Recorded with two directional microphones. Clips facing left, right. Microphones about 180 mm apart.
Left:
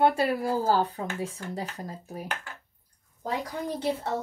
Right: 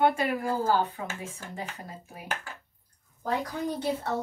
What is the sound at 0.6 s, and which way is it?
Speech, 35° left (ahead or behind).